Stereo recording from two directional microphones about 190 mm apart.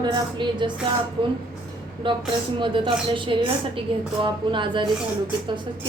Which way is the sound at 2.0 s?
25° right (ahead or behind).